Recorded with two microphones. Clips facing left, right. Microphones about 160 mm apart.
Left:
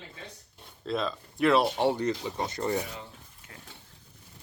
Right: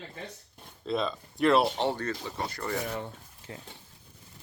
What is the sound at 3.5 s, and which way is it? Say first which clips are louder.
Speech: right 8 dB; 25° right (ahead or behind).